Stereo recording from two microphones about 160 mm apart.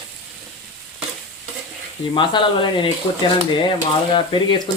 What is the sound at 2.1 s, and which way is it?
Speech, 30° left (ahead or behind).